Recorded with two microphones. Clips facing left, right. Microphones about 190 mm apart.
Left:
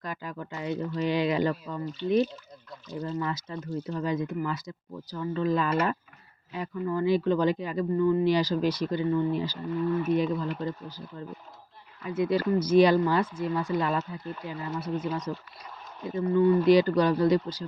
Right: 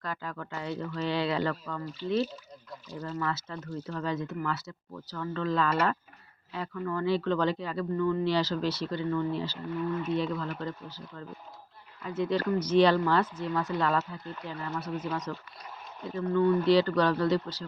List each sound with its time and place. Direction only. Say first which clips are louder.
0.0 s a sound: left 1 dB; 15° left (ahead or behind)
3.2 s speech: left 2 dB; 15° left (ahead or behind)
12.0 s speech: left 3 dB; 10° left (ahead or behind)